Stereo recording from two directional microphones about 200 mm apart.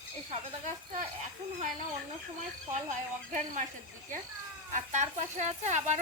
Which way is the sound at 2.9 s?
35° right (ahead or behind).